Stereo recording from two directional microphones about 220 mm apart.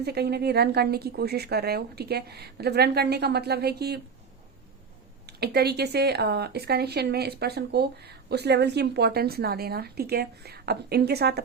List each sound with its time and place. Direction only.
0.0 s speech: 45° right (ahead or behind)
5.2 s speech: 45° right (ahead or behind)